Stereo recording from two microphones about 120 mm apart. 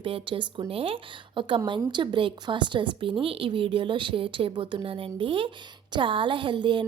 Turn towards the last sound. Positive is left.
turn(degrees=-40)  # may be behind; listen again after turning